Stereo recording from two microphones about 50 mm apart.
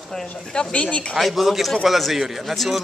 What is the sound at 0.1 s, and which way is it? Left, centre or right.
Speech, centre.